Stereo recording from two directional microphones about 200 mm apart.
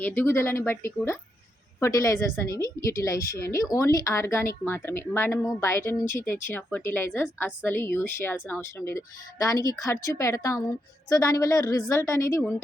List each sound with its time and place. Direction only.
0.0 s speech: 10° left (ahead or behind)